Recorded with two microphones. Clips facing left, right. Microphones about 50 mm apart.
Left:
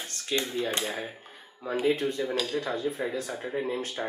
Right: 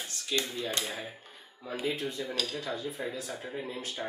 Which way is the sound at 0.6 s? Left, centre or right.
Left.